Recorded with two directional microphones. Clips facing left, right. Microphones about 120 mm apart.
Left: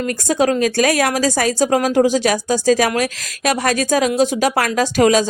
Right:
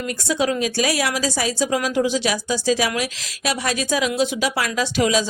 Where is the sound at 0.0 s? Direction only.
45° left (ahead or behind).